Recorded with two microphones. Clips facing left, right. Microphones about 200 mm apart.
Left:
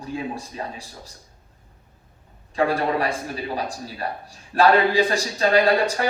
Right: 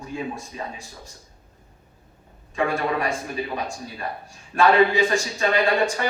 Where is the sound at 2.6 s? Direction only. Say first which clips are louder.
Left 2 dB; 35° left (ahead or behind).